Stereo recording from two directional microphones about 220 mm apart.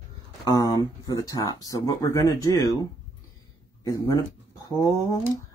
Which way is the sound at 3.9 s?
15° left (ahead or behind).